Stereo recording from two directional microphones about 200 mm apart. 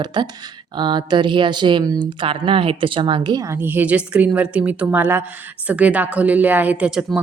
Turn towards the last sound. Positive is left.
turn(degrees=-5)  # may be behind; listen again after turning